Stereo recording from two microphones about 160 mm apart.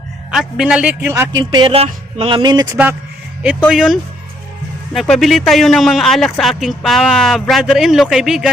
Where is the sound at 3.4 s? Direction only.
10° right (ahead or behind).